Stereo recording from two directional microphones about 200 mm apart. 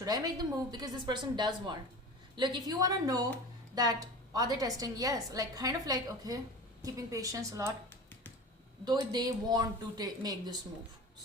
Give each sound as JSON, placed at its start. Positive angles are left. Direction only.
{"t": 0.0, "sound": "a woman's voice", "side_deg": -20}
{"t": 8.8, "sound": "speech", "side_deg": -20}